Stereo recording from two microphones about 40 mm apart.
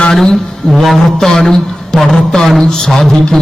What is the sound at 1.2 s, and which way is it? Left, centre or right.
A man's voice, centre.